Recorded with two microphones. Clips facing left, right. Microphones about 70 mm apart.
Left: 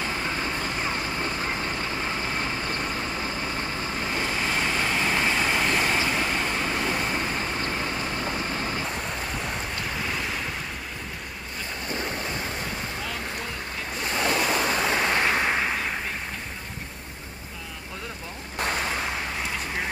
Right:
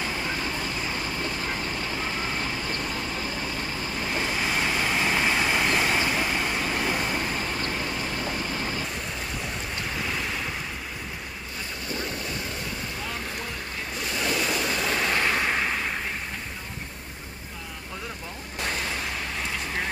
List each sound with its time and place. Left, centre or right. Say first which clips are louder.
1.1 s vehicle: left 2 dB; left
4.2 s vehicle: even; centre
7.3 s vehicle: left 1 dB; left
11.9 s boat: left 2 dB; left
14.1 s waves: left 3 dB; left
14.9 s a sound: right 1 dB; left